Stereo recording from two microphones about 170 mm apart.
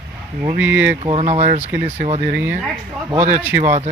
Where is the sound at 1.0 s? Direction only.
35° right (ahead or behind).